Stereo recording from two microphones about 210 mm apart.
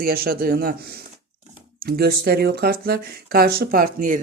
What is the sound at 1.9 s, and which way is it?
Speech, 45° right (ahead or behind).